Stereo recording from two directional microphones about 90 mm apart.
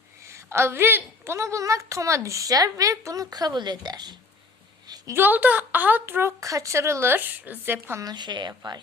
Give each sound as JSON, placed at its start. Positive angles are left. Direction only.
{"t": 0.2, "sound": "a woman's voice", "side_deg": -30}
{"t": 5.1, "sound": "a woman's voice", "side_deg": -20}
{"t": 6.4, "sound": "a woman's voice", "side_deg": -35}
{"t": 8.0, "sound": "a woman's voice", "side_deg": -55}